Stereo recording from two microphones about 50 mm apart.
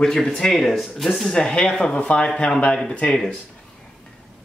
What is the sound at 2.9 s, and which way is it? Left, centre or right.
Speech, left.